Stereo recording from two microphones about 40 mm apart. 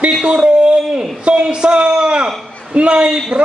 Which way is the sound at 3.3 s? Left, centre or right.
Right.